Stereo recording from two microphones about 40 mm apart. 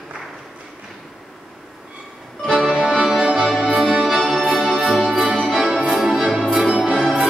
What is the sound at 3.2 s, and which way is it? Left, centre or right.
Music, right.